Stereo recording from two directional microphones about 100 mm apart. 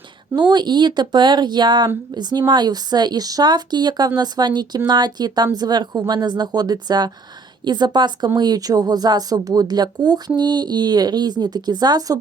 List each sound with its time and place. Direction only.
0.3 s speech: 45° right (ahead or behind)